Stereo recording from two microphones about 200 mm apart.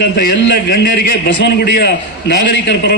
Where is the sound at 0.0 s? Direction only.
55° left (ahead or behind).